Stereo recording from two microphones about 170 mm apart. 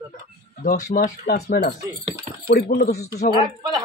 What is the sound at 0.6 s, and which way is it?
Speech, 50° left (ahead or behind).